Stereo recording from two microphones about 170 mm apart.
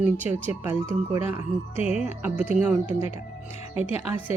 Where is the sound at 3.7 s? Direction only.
35° left (ahead or behind).